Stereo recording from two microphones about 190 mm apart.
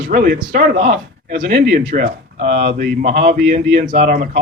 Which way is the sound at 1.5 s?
55° right (ahead or behind).